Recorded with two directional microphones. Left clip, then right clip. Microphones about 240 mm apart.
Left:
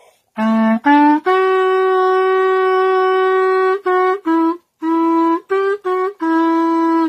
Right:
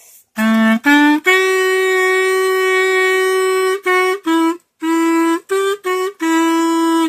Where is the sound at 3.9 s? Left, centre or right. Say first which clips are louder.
Even; right.